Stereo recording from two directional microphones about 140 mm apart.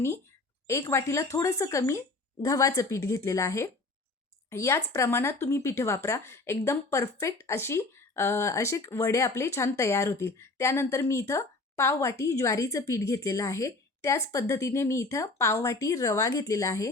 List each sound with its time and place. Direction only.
0.7 s a woman's voice: 20° left (ahead or behind)